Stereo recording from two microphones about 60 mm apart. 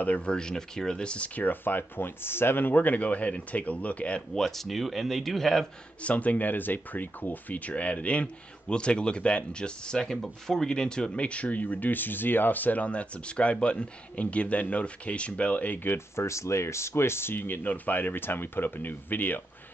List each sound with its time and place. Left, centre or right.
0.0 s speech: left
4.4 s speech: centre
6.0 s speech: left
16.2 s speech: left